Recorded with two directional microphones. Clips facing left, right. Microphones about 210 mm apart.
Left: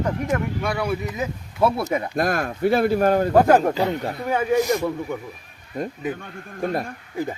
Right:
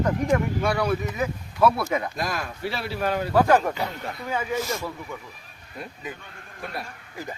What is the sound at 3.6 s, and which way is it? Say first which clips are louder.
Speech: left 7 dB; 30° left (ahead or behind).